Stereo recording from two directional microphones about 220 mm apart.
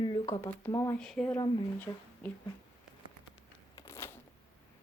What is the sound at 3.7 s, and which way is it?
Shuffling cards, 10° left (ahead or behind).